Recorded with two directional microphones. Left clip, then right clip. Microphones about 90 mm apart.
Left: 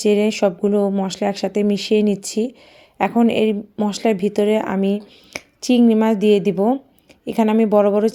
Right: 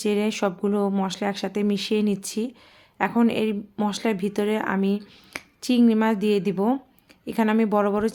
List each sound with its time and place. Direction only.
0.0 s speech: 25° left (ahead or behind)
5.3 s a sound: 25° left (ahead or behind)
5.9 s speech: 25° left (ahead or behind)